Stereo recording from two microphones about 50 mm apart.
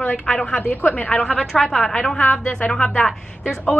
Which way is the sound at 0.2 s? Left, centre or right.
Centre.